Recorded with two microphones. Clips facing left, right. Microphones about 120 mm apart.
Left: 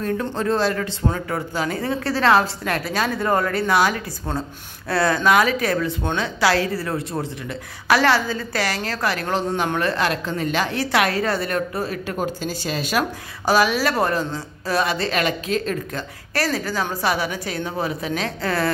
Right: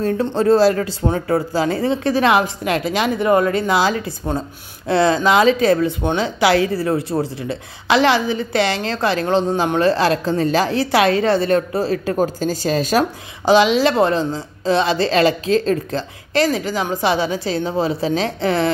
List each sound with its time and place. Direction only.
0.0 s speech: 30° right (ahead or behind)
13.5 s speech: 20° right (ahead or behind)
16.4 s speech: 20° right (ahead or behind)